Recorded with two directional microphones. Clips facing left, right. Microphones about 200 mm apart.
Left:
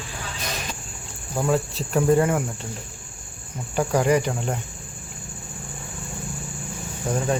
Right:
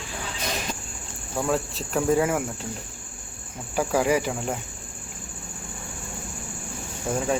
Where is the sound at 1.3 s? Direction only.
Centre (ahead or behind).